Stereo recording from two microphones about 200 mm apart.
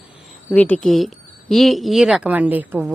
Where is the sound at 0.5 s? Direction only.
5° left (ahead or behind).